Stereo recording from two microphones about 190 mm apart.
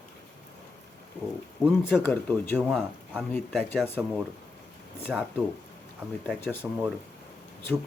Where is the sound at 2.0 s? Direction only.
10° left (ahead or behind).